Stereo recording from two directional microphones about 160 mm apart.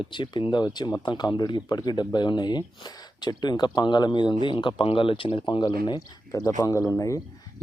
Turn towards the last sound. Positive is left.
turn(degrees=20)  # may be behind; listen again after turning